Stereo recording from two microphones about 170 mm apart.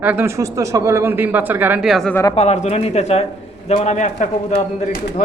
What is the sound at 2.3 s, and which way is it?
A man's voice, 40° left (ahead or behind).